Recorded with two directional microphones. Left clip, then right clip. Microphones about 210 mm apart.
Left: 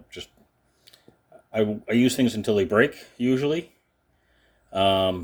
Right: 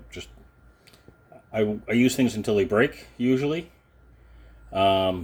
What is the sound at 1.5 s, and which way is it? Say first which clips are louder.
Speech: left 1 dB; 20° left (ahead or behind).